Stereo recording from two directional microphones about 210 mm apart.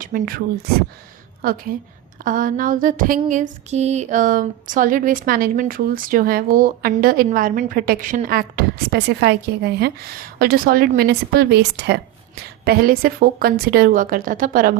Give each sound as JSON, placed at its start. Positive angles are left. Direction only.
{"t": 0.0, "sound": "a woman's voice", "side_deg": -40}
{"t": 2.2, "sound": "a sound", "side_deg": -40}
{"t": 12.6, "sound": "a woman's voice", "side_deg": -45}